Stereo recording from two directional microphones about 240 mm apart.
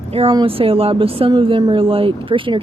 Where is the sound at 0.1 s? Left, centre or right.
Right.